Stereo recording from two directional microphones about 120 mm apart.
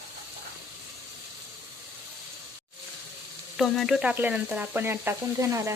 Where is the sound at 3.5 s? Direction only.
Centre (ahead or behind); by 5.7 s 25° right (ahead or behind).